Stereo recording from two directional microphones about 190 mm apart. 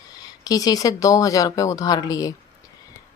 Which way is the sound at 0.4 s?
20° left (ahead or behind).